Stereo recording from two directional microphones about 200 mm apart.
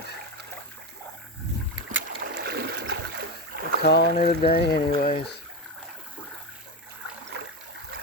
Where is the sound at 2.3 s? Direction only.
55° right (ahead or behind).